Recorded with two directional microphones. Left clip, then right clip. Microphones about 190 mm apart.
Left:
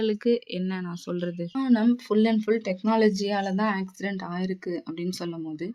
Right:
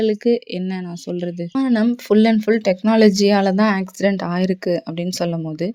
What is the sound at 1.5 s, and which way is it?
Speech, 35° right (ahead or behind).